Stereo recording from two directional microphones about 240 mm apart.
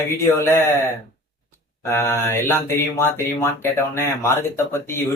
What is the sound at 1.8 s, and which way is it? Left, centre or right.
Speech, centre.